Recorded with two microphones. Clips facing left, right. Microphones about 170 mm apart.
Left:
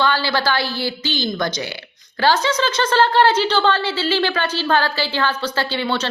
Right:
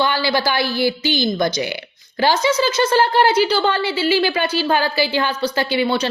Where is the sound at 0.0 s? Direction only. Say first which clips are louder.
Right 1 dB; 15° right (ahead or behind).